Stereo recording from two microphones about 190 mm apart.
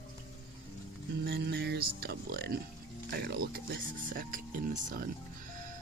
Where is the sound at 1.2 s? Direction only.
60° right (ahead or behind).